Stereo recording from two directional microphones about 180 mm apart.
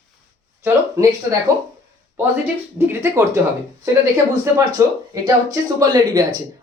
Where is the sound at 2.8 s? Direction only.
15° right (ahead or behind).